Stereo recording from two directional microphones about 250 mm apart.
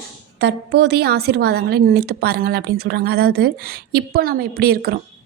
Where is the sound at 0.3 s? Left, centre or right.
Right.